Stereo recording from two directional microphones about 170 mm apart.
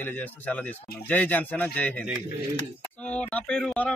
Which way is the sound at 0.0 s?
10° left (ahead or behind).